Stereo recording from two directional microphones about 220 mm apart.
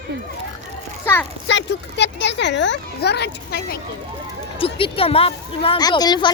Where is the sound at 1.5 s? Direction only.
55° left (ahead or behind).